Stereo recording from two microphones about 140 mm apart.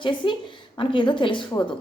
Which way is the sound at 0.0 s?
35° left (ahead or behind).